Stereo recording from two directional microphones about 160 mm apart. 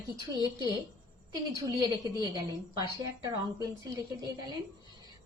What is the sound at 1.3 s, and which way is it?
A woman's voice, 25° right (ahead or behind).